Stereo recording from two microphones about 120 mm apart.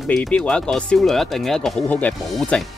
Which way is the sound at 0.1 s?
5° left (ahead or behind).